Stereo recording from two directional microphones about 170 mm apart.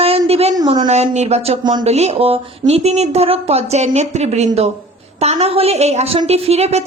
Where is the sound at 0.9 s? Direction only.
40° right (ahead or behind).